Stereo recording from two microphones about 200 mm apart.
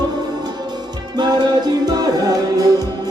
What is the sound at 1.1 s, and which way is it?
Music, 20° right (ahead or behind).